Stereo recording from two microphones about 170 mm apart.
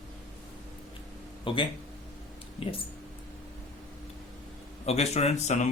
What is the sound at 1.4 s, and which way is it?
Speech, 30° left (ahead or behind).